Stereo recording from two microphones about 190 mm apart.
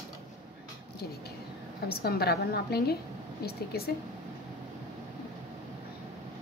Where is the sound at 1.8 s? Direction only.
55° left (ahead or behind).